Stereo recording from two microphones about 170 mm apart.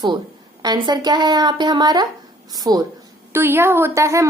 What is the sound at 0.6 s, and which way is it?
A woman's voice, 25° right (ahead or behind).